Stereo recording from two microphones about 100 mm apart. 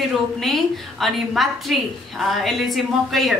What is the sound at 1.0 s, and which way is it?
A woman's voice, centre (ahead or behind).